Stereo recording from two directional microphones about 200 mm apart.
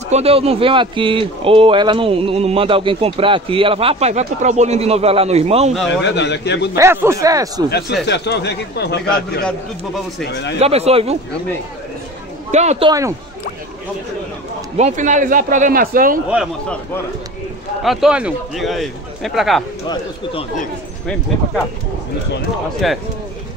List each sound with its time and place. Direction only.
0.1 s speech: 30° right (ahead or behind)
5.9 s a man's voice: 60° left (ahead or behind)
6.7 s speech: 15° right (ahead or behind)
8.0 s a man's voice: 60° left (ahead or behind)
10.6 s speech: 30° right (ahead or behind)
12.4 s speech: 35° right (ahead or behind)
14.8 s speech: 35° right (ahead or behind)
17.8 s speech: 5° right (ahead or behind)
22.8 s speech: centre (ahead or behind)